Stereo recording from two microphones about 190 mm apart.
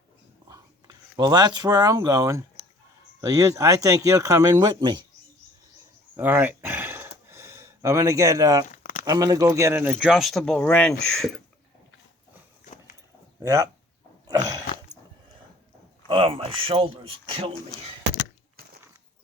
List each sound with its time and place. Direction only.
0.4 s speech: 20° right (ahead or behind)
6.1 s a sound: 10° right (ahead or behind)
8.7 s a sound: 45° left (ahead or behind)
9.0 s speech: 20° right (ahead or behind); by 11.3 s centre (ahead or behind)
13.4 s speech: 15° right (ahead or behind)
16.0 s speech: 30° right (ahead or behind)